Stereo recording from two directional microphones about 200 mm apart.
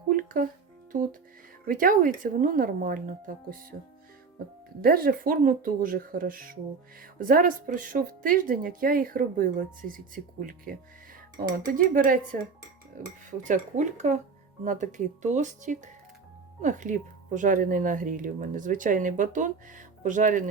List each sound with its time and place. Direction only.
0.1 s music: 45° right (ahead or behind)
1.6 s speech: 45° right (ahead or behind)
4.8 s speech: 45° right (ahead or behind)
11.3 s speech: 45° right (ahead or behind)